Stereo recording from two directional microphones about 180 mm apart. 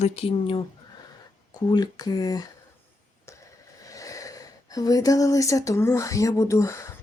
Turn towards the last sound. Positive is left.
turn(degrees=15)  # may be behind; listen again after turning